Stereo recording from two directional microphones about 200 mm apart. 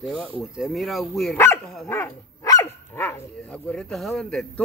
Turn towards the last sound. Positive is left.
turn(degrees=0)  # may be behind; listen again after turning